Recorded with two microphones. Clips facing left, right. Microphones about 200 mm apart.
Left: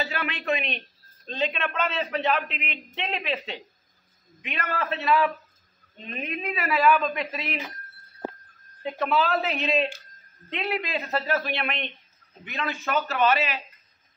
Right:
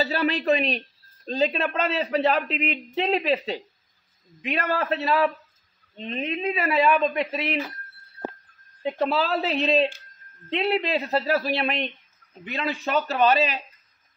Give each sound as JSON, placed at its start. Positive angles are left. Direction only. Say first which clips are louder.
{"t": 0.0, "sound": "speech", "louder": "right 7 dB", "side_deg": -35}
{"t": 8.8, "sound": "speech", "louder": "right 1 dB", "side_deg": -35}